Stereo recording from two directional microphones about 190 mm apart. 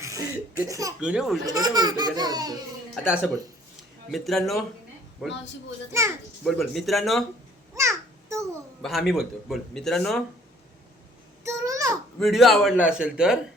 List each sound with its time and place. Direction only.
0.0 s laughter: 15° right (ahead or behind)
0.7 s speech: 15° right (ahead or behind)
0.9 s speech: 5° right (ahead or behind)
1.5 s speech: 20° right (ahead or behind)
2.9 s speech: 5° right (ahead or behind)
6.4 s speech: centre (ahead or behind)
7.8 s a sound: 15° right (ahead or behind)
8.8 s speech: centre (ahead or behind)
11.4 s babbling: 15° right (ahead or behind)
12.2 s speech: centre (ahead or behind)